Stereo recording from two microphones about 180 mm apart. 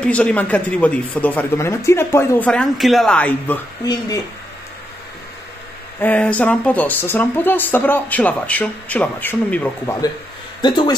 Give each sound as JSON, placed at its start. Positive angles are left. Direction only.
{"t": 0.0, "sound": "speech", "side_deg": 5}
{"t": 3.8, "sound": "speech", "side_deg": 20}
{"t": 5.9, "sound": "speech", "side_deg": 10}
{"t": 10.6, "sound": "speech", "side_deg": 25}